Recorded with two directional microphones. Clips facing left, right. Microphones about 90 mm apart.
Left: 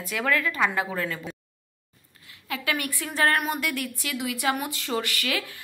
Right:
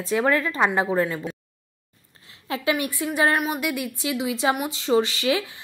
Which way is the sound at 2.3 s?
25° right (ahead or behind).